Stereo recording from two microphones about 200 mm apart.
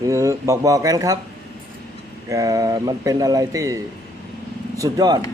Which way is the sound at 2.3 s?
15° right (ahead or behind).